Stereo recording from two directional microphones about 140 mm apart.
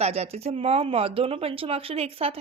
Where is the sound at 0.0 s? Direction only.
50° right (ahead or behind).